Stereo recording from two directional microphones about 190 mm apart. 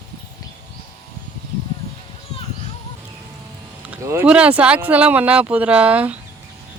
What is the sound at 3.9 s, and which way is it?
Speech, 10° right (ahead or behind).